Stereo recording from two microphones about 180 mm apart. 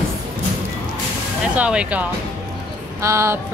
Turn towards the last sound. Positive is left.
turn(degrees=-15)  # may be behind; listen again after turning